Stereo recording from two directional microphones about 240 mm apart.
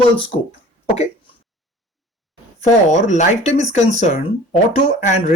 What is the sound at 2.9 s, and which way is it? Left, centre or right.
Speech, left.